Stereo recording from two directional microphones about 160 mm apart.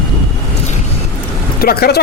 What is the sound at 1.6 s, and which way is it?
Speech, 75° left (ahead or behind).